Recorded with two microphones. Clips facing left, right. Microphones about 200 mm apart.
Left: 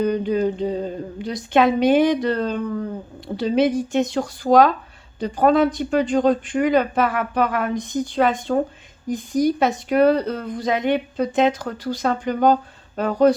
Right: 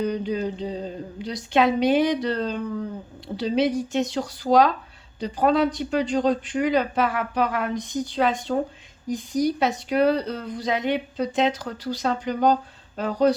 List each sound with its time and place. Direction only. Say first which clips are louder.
0.0 s speech: left 5 dB; 55° left (ahead or behind)